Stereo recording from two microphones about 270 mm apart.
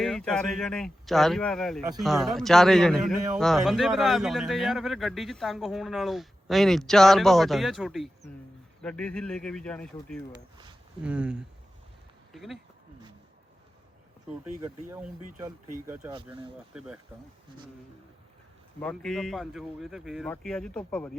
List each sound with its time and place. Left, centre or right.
0.0 s speech: centre
14.8 s speech: centre
16.7 s speech: centre
18.8 s speech: centre